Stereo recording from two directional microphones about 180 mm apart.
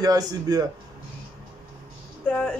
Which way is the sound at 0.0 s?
20° right (ahead or behind).